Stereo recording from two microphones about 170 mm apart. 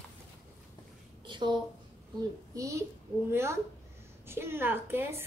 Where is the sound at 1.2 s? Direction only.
25° right (ahead or behind).